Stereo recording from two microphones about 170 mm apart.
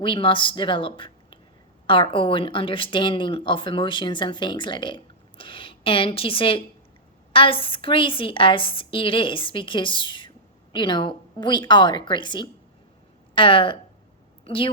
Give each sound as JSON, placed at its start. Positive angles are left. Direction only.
{"t": 0.0, "sound": "a woman's voice", "side_deg": 30}